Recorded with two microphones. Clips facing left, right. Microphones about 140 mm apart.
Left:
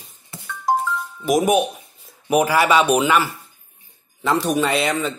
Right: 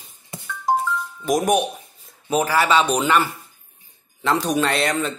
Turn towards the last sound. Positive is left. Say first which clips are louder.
# left 1 dB
turn(degrees=0)  # may be behind; listen again after turning